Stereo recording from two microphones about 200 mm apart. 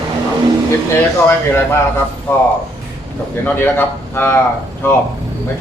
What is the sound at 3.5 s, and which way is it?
Speech, 10° left (ahead or behind).